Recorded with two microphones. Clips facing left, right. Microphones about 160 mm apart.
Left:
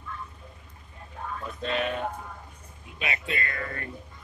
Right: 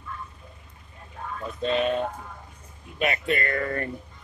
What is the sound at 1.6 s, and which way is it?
Speech, 20° right (ahead or behind).